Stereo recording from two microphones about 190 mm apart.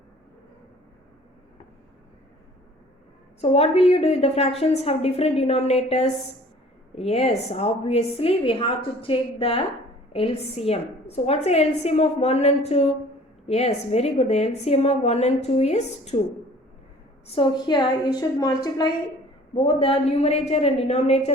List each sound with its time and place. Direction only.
3.4 s a woman's voice: 35° left (ahead or behind)
17.2 s a woman's voice: 30° left (ahead or behind)